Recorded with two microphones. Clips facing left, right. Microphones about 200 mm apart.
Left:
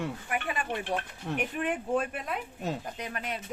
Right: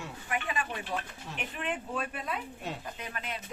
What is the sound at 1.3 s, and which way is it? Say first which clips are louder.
Speech: left 6 dB; 50° left (ahead or behind).